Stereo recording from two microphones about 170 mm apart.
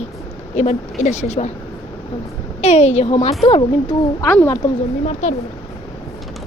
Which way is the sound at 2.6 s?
40° left (ahead or behind).